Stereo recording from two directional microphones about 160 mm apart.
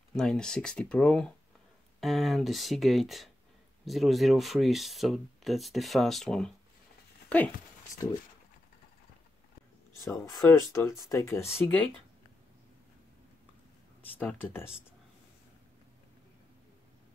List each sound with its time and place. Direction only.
0.1 s speech: 5° left (ahead or behind)
7.9 s speech: 20° left (ahead or behind)
10.2 s speech: 20° left (ahead or behind)
14.1 s speech: 10° left (ahead or behind)